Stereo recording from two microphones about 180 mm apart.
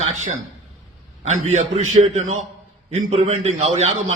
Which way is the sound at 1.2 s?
40° right (ahead or behind).